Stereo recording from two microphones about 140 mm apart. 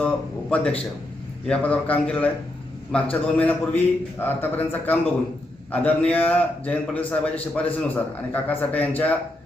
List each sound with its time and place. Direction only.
0.5 s a man's voice: 10° left (ahead or behind)